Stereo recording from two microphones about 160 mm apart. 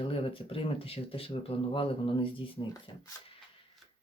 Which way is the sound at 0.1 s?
35° left (ahead or behind).